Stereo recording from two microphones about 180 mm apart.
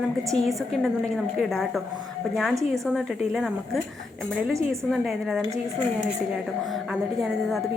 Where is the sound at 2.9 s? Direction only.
Centre (ahead or behind).